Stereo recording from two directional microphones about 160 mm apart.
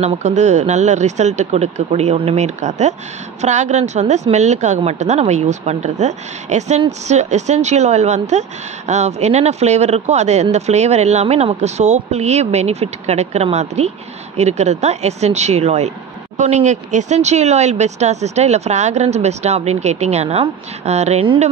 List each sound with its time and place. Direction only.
0.0 s speech: 45° right (ahead or behind)